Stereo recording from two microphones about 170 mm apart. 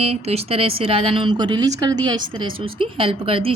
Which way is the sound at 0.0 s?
35° right (ahead or behind).